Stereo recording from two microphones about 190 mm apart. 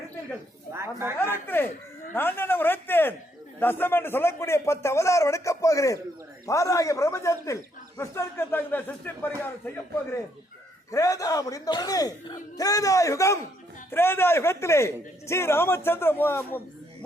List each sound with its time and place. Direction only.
0.7 s a woman's voice: 15° right (ahead or behind)
1.5 s speech: 10° left (ahead or behind)